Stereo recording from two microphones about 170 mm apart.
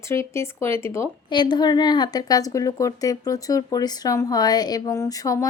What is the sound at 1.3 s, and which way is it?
A woman's voice, 25° left (ahead or behind).